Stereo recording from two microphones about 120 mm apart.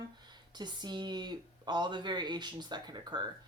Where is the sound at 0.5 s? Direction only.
35° right (ahead or behind).